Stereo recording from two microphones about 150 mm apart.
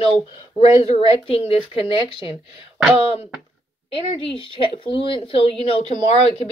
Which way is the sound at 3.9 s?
35° left (ahead or behind).